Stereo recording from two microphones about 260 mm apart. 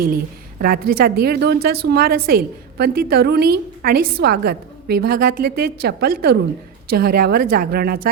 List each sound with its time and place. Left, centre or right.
0.0 s a woman's voice: right